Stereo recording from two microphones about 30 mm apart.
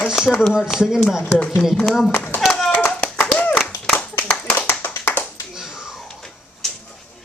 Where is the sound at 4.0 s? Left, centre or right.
Left.